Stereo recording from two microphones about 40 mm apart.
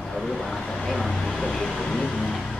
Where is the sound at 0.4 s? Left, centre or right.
Centre.